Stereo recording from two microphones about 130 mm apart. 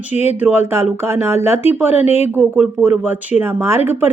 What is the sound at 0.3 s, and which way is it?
Speech, 15° right (ahead or behind).